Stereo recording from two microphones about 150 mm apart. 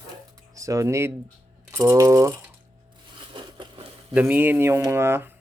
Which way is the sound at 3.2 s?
35° right (ahead or behind).